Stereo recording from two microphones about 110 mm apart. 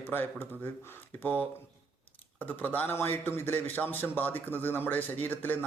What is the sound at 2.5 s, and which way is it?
A man's voice, 15° left (ahead or behind).